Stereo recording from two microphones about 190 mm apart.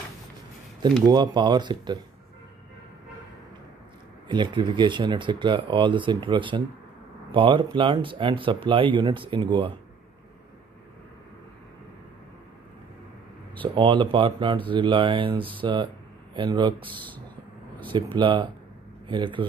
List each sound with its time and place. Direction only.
1.0 s speech: 25° right (ahead or behind)
4.3 s speech: 25° right (ahead or behind)
13.6 s speech: 25° right (ahead or behind)